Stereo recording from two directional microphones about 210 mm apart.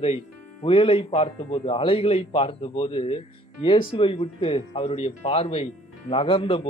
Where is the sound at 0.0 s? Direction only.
30° left (ahead or behind).